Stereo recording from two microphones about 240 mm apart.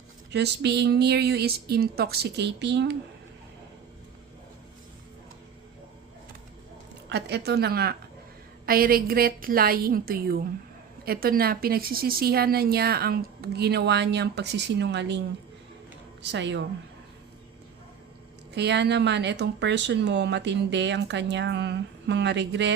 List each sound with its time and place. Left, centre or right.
0.3 s speech: right
7.1 s a woman's voice: right
16.3 s speech: right
18.5 s speech: right